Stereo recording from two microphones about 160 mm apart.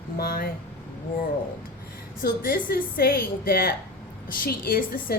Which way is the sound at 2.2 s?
65° left (ahead or behind).